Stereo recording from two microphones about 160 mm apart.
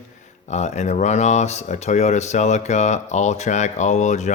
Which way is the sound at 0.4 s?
45° left (ahead or behind).